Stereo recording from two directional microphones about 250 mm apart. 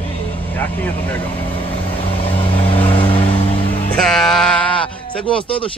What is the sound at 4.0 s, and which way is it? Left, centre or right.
Music, centre.